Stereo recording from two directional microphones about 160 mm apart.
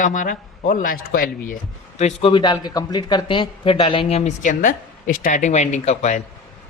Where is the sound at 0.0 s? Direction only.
55° left (ahead or behind).